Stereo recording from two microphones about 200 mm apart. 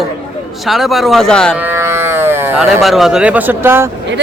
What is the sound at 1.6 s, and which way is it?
Speech, 10° right (ahead or behind).